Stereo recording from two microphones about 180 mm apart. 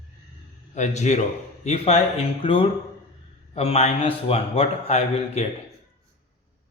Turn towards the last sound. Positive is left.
turn(degrees=35)  # may be behind; listen again after turning